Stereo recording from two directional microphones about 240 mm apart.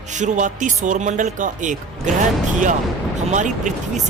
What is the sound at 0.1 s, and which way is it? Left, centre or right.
Speech, right.